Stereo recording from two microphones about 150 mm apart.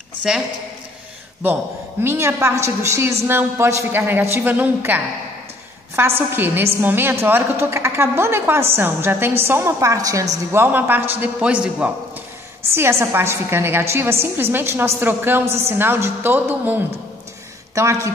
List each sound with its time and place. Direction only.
1.4 s a woman's voice: 15° right (ahead or behind)